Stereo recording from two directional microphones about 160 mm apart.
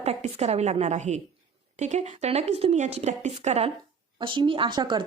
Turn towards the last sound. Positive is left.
turn(degrees=-30)  # may be behind; listen again after turning